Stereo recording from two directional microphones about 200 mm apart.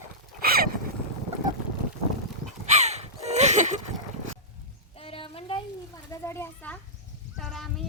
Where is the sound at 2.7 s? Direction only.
35° right (ahead or behind).